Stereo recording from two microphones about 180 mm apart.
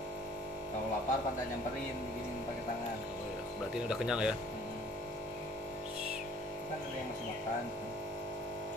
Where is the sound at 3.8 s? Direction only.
5° right (ahead or behind).